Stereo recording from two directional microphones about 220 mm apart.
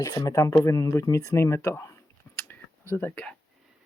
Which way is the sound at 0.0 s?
15° left (ahead or behind).